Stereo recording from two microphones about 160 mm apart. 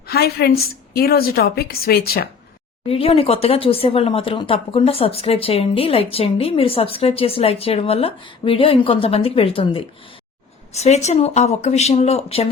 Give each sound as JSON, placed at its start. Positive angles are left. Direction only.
{"t": 0.1, "sound": "a woman's voice", "side_deg": 80}
{"t": 2.8, "sound": "speech", "side_deg": 35}